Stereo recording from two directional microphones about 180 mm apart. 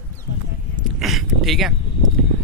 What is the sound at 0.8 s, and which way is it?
Speech, centre (ahead or behind).